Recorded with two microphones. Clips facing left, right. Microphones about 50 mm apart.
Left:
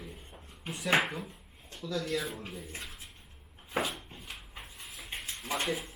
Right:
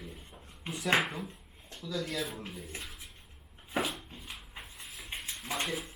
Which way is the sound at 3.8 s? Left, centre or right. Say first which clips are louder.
Left 1 dB; centre.